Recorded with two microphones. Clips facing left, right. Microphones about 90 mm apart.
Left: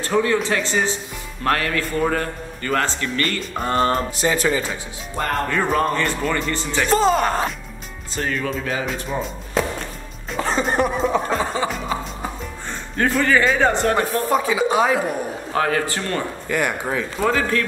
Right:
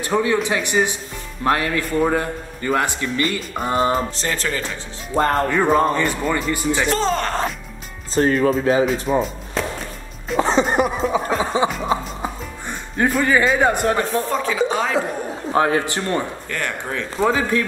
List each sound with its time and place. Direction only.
0.0 s speech: 15° right (ahead or behind)
4.2 s speech: 10° left (ahead or behind)
5.1 s speech: 30° right (ahead or behind)
5.5 s speech: 15° right (ahead or behind)
6.9 s speech: 10° left (ahead or behind)
8.1 s a man's voice: 35° right (ahead or behind)
9.2 s music: centre (ahead or behind)
11.0 s chuckle: 5° right (ahead or behind)
13.2 s speech: 10° right (ahead or behind)
14.3 s speech: 10° left (ahead or behind)
15.5 s a man's voice: 25° right (ahead or behind)
16.4 s speech: 10° left (ahead or behind)
17.2 s speech: 15° right (ahead or behind)